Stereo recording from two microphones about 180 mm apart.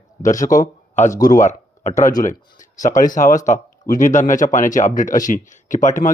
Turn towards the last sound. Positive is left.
turn(degrees=45)  # may be behind; listen again after turning